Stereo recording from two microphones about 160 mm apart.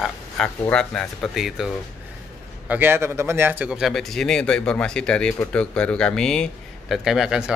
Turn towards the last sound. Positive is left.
turn(degrees=-5)  # may be behind; listen again after turning